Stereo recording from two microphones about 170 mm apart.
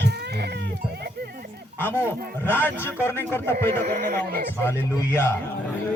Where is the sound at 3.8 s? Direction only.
65° right (ahead or behind).